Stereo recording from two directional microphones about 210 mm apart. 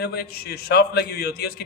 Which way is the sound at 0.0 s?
50° left (ahead or behind).